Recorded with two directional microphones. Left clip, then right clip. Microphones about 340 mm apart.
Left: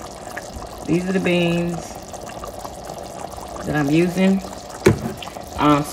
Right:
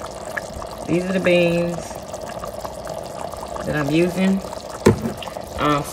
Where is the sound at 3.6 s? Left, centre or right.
Centre.